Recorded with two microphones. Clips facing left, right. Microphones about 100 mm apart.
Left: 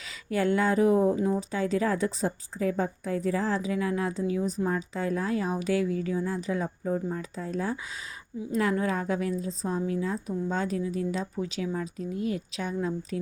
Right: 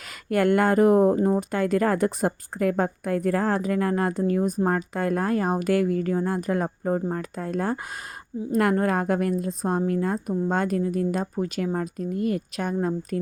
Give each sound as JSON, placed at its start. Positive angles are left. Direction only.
{"t": 0.3, "sound": "speech", "side_deg": -60}